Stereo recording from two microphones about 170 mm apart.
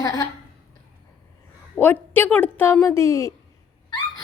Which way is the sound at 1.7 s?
10° left (ahead or behind).